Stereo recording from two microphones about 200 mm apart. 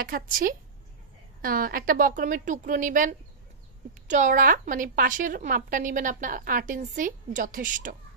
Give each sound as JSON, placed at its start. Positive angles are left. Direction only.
{"t": 0.0, "sound": "a woman's voice", "side_deg": -45}